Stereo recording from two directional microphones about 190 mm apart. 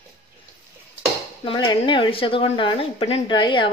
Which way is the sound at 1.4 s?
25° left (ahead or behind).